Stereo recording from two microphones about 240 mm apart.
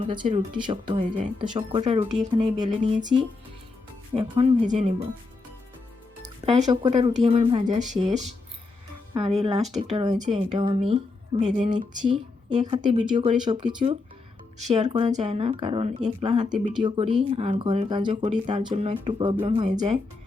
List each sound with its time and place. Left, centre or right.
0.0 s speech: centre
0.9 s speech: right
1.4 s speech: right
4.1 s speech: right
6.4 s speech: right